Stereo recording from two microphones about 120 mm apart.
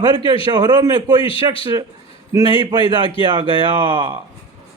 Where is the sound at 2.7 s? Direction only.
40° right (ahead or behind).